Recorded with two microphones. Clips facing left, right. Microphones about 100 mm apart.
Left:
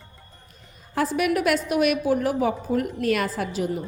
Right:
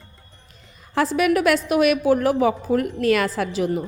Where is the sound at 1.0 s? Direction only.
90° right.